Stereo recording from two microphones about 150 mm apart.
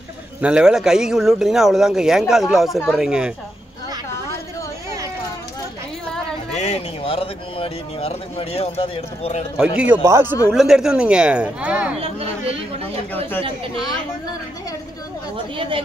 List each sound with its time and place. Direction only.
0.4 s speech: 5° right (ahead or behind)
6.5 s a man's voice: 45° left (ahead or behind)
9.6 s speech: 5° right (ahead or behind)
10.5 s speech: 5° right (ahead or behind)
12.0 s speech: 40° right (ahead or behind)
15.5 s speech: 35° right (ahead or behind)